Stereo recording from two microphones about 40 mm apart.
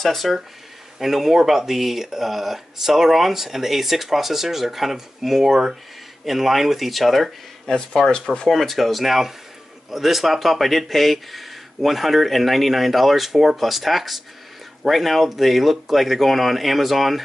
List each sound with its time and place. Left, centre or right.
0.0 s speech: centre
7.6 s speech: centre
8.5 s speech: centre